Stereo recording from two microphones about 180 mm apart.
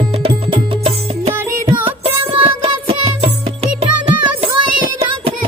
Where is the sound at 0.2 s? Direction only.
30° right (ahead or behind).